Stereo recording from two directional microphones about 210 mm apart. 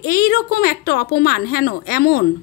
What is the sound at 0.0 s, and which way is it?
A woman's voice, 45° left (ahead or behind).